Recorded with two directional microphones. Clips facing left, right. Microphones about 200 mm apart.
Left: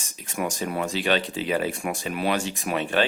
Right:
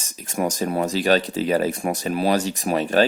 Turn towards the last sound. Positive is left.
turn(degrees=-40)  # may be behind; listen again after turning